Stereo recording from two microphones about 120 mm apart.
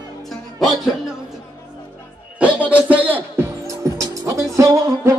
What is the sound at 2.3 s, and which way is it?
Music, 10° right (ahead or behind).